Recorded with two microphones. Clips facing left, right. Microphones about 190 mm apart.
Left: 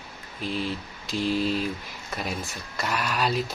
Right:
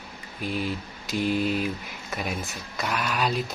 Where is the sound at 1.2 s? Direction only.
55° right (ahead or behind).